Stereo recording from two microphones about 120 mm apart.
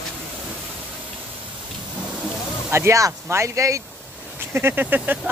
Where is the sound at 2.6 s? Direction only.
20° right (ahead or behind).